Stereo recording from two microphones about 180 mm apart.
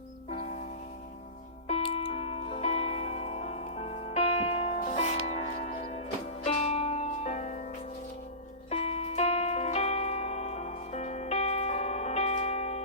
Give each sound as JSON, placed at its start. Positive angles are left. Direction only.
{"t": 0.3, "sound": "music", "side_deg": 35}
{"t": 8.7, "sound": "music", "side_deg": 35}